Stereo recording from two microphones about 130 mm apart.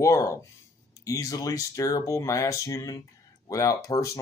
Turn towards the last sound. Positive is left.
turn(degrees=25)  # may be behind; listen again after turning